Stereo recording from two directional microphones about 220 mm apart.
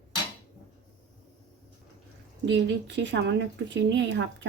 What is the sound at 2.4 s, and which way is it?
Speech, 55° right (ahead or behind).